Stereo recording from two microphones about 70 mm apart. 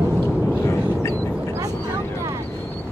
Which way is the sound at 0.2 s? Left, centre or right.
Centre.